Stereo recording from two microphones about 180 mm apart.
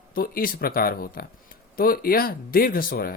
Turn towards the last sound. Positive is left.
turn(degrees=55)  # may be behind; listen again after turning